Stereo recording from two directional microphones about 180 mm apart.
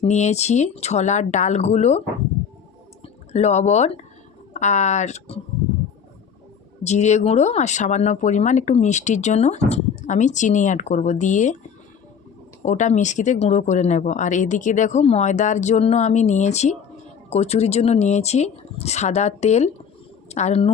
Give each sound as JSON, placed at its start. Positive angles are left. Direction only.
{"t": 0.0, "sound": "speech", "side_deg": 40}
{"t": 3.3, "sound": "speech", "side_deg": 40}
{"t": 6.8, "sound": "speech", "side_deg": 40}
{"t": 12.6, "sound": "speech", "side_deg": 45}